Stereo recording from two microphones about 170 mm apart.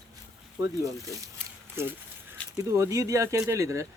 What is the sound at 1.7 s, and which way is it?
Speech, 15° right (ahead or behind).